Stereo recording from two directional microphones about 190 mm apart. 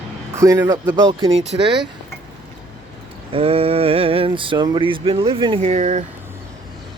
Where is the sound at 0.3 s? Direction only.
15° right (ahead or behind).